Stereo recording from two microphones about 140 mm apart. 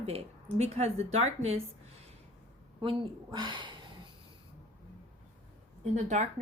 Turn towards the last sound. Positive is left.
turn(degrees=-60)  # may be behind; listen again after turning